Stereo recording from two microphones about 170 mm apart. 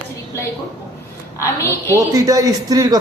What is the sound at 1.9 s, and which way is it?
A man's voice, 20° right (ahead or behind).